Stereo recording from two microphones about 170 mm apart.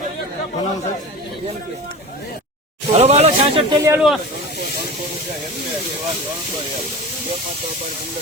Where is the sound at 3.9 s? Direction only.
Centre (ahead or behind).